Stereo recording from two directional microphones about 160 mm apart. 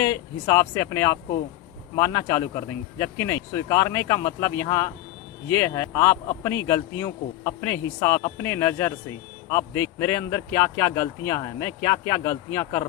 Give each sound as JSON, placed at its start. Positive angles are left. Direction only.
{"t": 0.0, "sound": "speech", "side_deg": 15}